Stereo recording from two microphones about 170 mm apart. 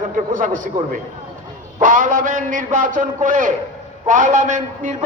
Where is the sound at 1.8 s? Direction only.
50° right (ahead or behind).